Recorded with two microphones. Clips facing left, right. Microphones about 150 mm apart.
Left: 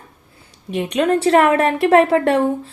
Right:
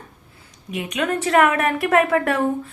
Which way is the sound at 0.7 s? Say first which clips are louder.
Left 6 dB; 35° left (ahead or behind).